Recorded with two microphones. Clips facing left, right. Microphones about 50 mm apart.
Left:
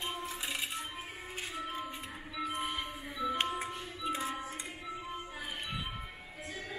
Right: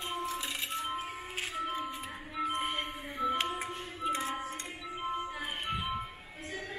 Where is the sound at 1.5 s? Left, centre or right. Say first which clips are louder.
Right 4 dB; right.